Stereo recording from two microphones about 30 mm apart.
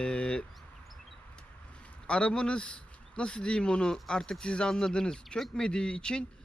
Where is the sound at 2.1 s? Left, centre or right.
Left.